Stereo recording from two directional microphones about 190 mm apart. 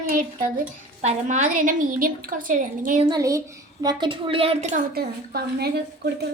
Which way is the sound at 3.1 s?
15° right (ahead or behind).